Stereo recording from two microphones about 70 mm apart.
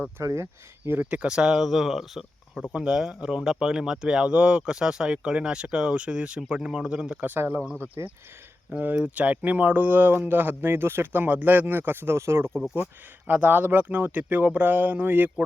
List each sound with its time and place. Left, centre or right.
0.2 s speech: right
1.1 s speech: centre
7.3 s speech: right
13.2 s speech: right